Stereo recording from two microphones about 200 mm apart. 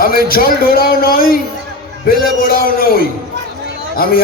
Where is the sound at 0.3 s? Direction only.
45° left (ahead or behind).